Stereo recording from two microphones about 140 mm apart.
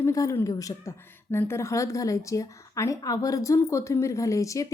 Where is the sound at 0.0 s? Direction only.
20° left (ahead or behind).